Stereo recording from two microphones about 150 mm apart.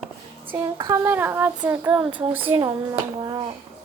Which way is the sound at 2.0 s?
35° right (ahead or behind).